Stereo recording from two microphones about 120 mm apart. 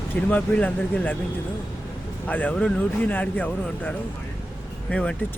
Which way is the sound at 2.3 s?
15° left (ahead or behind).